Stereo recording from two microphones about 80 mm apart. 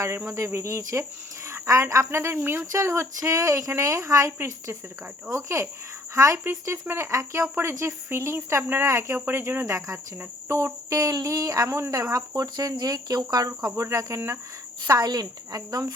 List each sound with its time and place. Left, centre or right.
0.3 s speech: right
14.8 s speech: right